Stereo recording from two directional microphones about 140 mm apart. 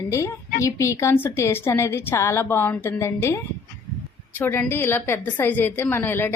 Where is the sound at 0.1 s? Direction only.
20° left (ahead or behind).